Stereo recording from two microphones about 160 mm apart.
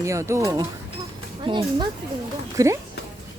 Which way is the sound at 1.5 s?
30° right (ahead or behind).